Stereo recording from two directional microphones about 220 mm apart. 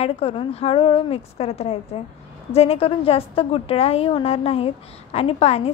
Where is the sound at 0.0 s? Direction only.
25° left (ahead or behind).